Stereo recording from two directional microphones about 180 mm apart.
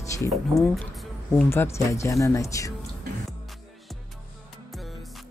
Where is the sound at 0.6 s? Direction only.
5° left (ahead or behind).